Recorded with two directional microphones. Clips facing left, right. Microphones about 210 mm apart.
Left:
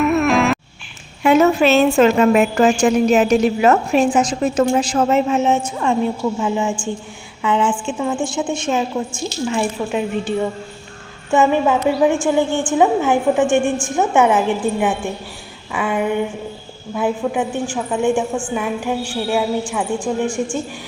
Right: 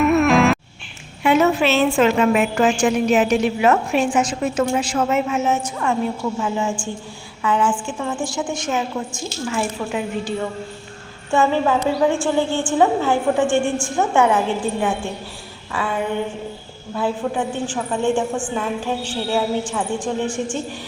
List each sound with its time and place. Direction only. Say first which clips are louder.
0.0 s music: right 1 dB; centre (ahead or behind)
1.2 s a woman's voice: left 3 dB; 45° left (ahead or behind); by 20.6 s 10° left (ahead or behind)